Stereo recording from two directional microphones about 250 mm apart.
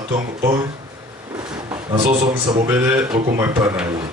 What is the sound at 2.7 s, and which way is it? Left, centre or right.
A man's voice, centre.